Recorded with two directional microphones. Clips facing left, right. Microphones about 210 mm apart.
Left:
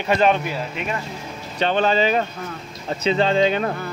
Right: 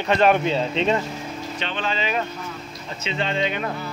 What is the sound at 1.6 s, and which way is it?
A man's voice, 40° left (ahead or behind).